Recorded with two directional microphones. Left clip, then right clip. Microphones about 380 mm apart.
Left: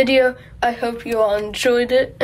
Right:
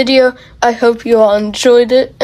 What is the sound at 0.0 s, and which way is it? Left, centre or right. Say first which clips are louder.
A woman's voice: right 5 dB; centre.